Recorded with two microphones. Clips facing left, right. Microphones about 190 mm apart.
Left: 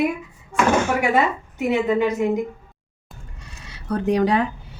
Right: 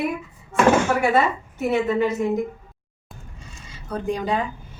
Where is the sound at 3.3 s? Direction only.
70° left (ahead or behind).